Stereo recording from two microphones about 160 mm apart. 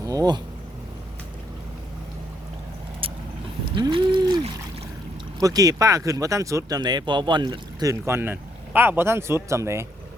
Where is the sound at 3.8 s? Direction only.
30° right (ahead or behind).